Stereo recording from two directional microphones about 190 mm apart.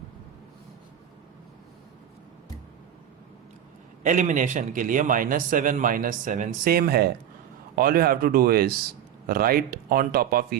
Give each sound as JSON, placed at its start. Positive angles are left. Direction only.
{"t": 4.0, "sound": "a man's voice", "side_deg": -40}